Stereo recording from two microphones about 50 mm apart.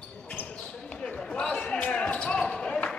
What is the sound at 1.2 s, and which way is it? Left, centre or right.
Basketball bounce, centre.